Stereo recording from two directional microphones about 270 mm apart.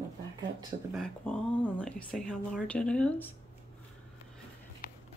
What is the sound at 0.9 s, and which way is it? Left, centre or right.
Speech, centre.